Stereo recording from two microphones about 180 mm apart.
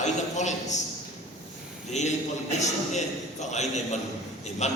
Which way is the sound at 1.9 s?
40° left (ahead or behind).